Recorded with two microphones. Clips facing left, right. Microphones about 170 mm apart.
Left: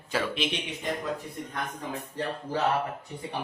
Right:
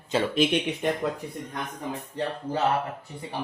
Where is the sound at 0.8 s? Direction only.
60° right (ahead or behind).